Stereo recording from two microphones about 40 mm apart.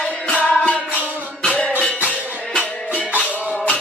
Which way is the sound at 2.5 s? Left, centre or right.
Left.